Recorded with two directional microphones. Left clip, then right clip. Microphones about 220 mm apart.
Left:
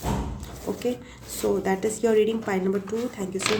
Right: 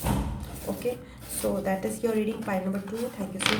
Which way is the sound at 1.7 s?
50° left (ahead or behind).